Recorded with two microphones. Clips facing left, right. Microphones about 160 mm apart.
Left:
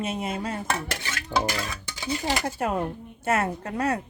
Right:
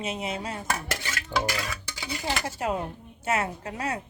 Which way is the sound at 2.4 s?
55° left (ahead or behind).